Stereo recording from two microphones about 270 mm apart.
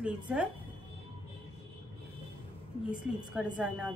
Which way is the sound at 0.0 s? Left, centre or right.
Centre.